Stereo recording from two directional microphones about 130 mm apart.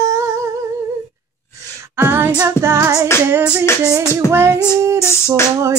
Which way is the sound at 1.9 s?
15° right (ahead or behind).